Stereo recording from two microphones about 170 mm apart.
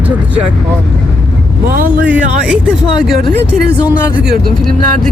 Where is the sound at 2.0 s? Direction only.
5° right (ahead or behind).